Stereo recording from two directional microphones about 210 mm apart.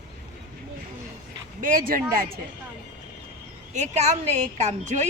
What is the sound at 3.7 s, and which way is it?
Speech, 30° right (ahead or behind).